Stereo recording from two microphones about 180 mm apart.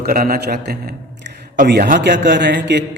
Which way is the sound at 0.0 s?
55° right (ahead or behind).